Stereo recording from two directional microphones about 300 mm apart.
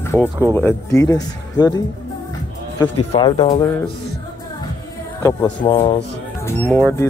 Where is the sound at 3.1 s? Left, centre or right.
Centre.